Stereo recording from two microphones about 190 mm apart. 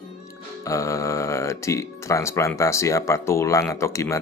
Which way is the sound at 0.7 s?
15° left (ahead or behind).